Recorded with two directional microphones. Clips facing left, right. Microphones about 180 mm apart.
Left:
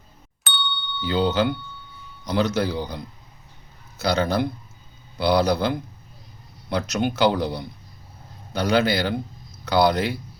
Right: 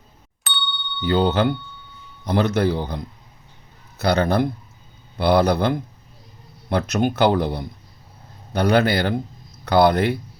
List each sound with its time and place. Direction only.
0.4 s ding: centre (ahead or behind)
1.0 s speech: 55° right (ahead or behind)